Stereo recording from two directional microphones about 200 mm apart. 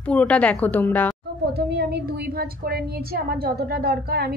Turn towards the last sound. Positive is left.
turn(degrees=-50)  # may be behind; listen again after turning